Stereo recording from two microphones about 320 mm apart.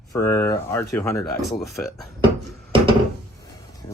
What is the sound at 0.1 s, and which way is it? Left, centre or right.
Speech, centre.